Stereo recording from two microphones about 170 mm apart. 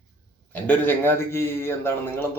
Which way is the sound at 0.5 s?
10° left (ahead or behind).